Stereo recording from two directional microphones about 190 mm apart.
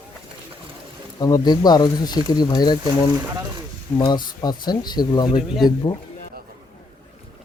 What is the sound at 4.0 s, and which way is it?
Speech, 25° left (ahead or behind).